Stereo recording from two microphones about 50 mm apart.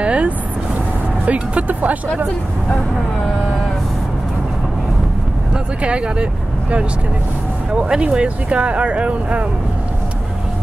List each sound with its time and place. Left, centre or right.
0.0 s vehicle: right
1.2 s speech: right
5.8 s speech: right
7.7 s speech: centre